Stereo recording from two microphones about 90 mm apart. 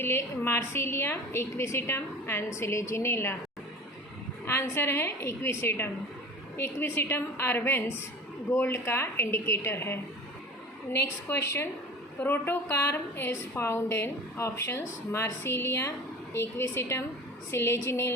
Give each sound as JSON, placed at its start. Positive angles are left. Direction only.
{"t": 0.0, "sound": "a woman's voice", "side_deg": 30}
{"t": 4.4, "sound": "a woman's voice", "side_deg": 30}
{"t": 11.0, "sound": "a woman's voice", "side_deg": 30}